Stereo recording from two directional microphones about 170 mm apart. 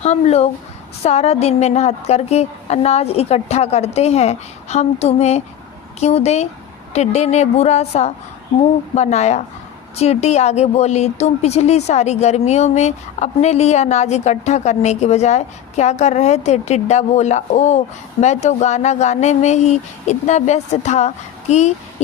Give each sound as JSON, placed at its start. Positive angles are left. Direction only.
{"t": 0.0, "sound": "speech", "side_deg": 40}